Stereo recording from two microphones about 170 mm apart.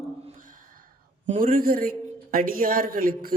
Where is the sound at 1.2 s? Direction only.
55° right (ahead or behind).